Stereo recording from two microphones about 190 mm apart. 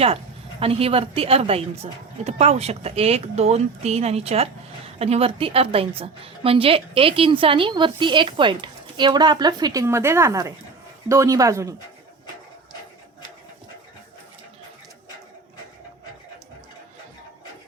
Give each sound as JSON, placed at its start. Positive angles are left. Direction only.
{"t": 0.6, "sound": "a woman's voice", "side_deg": -30}